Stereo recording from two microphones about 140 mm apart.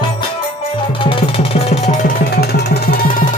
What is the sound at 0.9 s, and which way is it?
Music, 40° left (ahead or behind).